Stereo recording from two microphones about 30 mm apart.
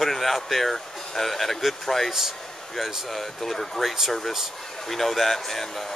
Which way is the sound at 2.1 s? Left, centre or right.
Centre.